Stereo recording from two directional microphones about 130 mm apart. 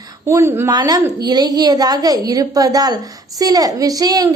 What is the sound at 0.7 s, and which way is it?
A woman's voice, 30° right (ahead or behind).